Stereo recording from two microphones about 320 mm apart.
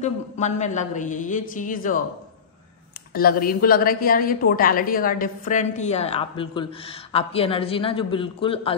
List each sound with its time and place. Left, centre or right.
0.0 s a woman's voice: left
3.2 s a woman's voice: left